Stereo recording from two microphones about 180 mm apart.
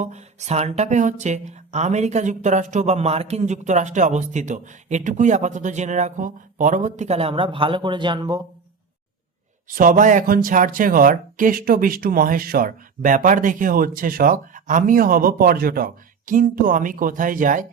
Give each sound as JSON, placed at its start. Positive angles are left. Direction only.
{"t": 0.0, "sound": "speech", "side_deg": -40}
{"t": 9.6, "sound": "speech", "side_deg": -50}